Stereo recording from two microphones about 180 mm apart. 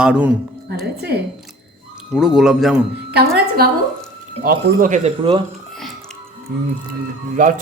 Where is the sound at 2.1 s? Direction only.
5° right (ahead or behind).